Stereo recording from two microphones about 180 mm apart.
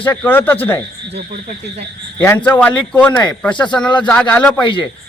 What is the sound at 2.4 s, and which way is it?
A man's voice, 10° left (ahead or behind).